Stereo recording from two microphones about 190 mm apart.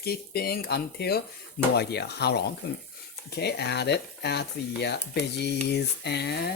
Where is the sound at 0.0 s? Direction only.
55° left (ahead or behind).